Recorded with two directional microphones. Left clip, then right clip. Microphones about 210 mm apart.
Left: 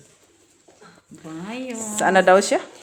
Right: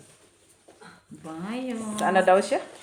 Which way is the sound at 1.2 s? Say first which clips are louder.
Left 2 dB; 50° left (ahead or behind).